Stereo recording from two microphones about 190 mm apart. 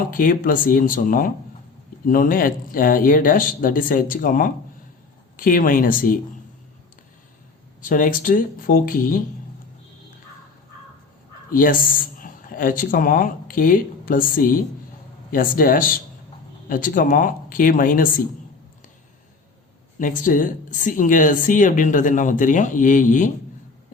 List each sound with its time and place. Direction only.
0.1 s speech: 45° left (ahead or behind)
7.8 s speech: 45° left (ahead or behind)
11.5 s speech: 45° left (ahead or behind)
20.0 s speech: 45° left (ahead or behind)